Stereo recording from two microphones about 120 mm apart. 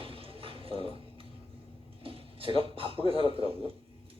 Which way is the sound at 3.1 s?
50° right (ahead or behind).